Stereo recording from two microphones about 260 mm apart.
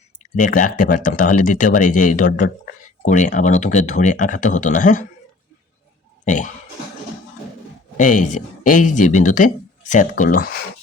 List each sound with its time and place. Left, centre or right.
0.2 s speech: left
6.2 s a sound: left
7.9 s speech: left